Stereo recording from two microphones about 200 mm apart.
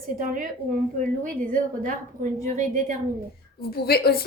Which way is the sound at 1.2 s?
40° right (ahead or behind).